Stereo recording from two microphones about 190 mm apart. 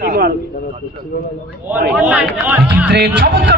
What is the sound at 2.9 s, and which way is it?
Music, 65° right (ahead or behind).